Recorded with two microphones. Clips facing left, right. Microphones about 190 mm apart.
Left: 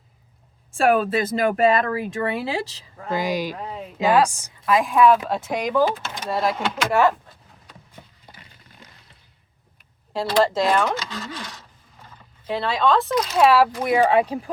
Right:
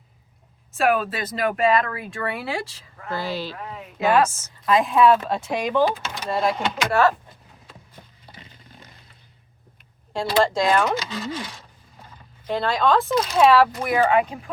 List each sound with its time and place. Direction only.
0.7 s a woman's voice: 30° left (ahead or behind)
3.6 s a sound: 30° left (ahead or behind)
4.0 s a woman's voice: 15° left (ahead or behind)
4.7 s a woman's voice: centre (ahead or behind)
7.0 s a woman's voice: 15° left (ahead or behind)
10.1 s speech: 5° left (ahead or behind)
12.5 s a woman's voice: 5° left (ahead or behind)
13.8 s speech: 25° left (ahead or behind)